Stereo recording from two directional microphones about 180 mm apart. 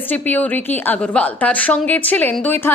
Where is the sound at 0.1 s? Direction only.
10° left (ahead or behind).